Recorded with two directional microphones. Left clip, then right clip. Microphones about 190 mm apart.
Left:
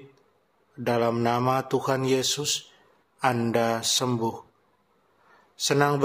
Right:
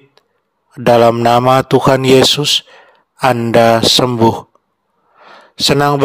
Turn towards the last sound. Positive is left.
turn(degrees=-55)  # may be behind; listen again after turning